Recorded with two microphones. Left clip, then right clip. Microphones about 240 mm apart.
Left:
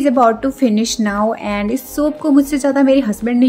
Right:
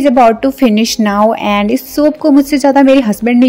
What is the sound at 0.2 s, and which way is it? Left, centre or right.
Speech, right.